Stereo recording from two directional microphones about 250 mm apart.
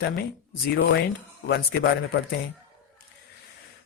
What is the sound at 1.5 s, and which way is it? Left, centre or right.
Speech, left.